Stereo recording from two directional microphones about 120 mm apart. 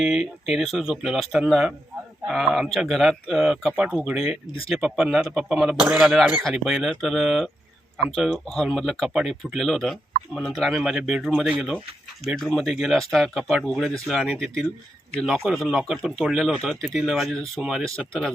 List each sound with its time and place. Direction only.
0.2 s speech: 65° left (ahead or behind)
0.6 s speech: centre (ahead or behind)